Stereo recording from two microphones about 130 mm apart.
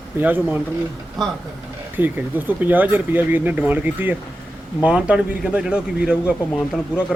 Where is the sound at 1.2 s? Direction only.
Centre (ahead or behind).